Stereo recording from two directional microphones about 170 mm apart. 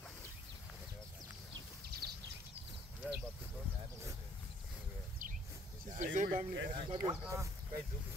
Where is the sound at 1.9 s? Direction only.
70° right (ahead or behind).